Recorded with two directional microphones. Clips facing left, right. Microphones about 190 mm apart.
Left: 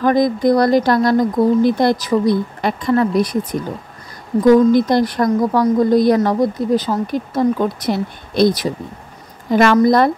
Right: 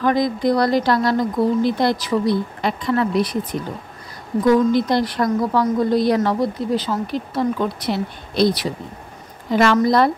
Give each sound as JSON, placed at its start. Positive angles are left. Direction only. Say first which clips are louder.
{"t": 0.0, "sound": "a woman's voice", "louder": "left 4 dB", "side_deg": 45}
{"t": 4.5, "sound": "a woman's voice", "louder": "left 5 dB", "side_deg": 45}